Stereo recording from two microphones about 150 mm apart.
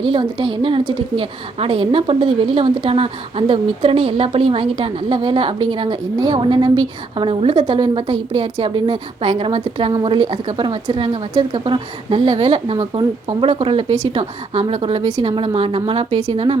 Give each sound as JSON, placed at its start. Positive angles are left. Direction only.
{"t": 0.0, "sound": "a woman's voice", "side_deg": -35}